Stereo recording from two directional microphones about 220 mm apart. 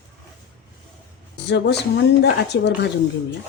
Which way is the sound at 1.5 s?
50° left (ahead or behind).